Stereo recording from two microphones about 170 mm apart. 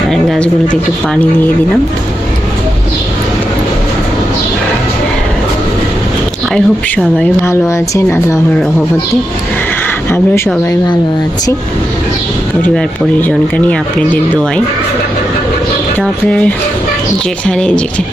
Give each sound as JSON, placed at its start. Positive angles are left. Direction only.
{"t": 0.1, "sound": "speech", "side_deg": 5}
{"t": 6.5, "sound": "speech", "side_deg": 10}
{"t": 10.1, "sound": "speech", "side_deg": 15}
{"t": 13.2, "sound": "speech", "side_deg": 10}
{"t": 16.0, "sound": "speech", "side_deg": 5}